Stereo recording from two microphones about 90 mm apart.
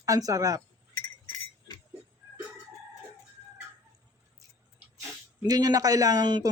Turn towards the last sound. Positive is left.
turn(degrees=-50)  # may be behind; listen again after turning